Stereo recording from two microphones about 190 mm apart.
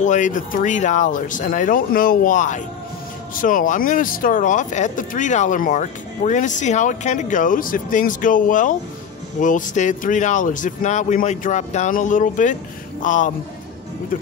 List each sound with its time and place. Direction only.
0.0 s speech: 40° left (ahead or behind)